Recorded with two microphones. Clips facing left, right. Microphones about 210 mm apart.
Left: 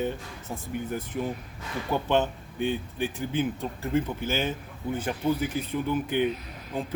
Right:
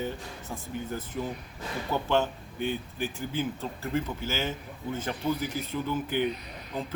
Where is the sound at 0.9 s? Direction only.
15° left (ahead or behind).